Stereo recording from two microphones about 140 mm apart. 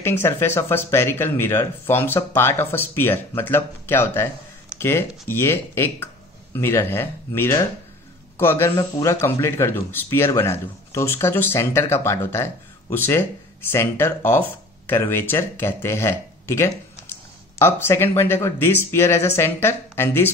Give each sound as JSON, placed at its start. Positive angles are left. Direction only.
{"t": 0.0, "sound": "speech", "side_deg": 15}